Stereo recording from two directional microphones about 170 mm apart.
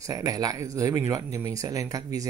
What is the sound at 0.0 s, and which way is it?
Speech, 20° right (ahead or behind).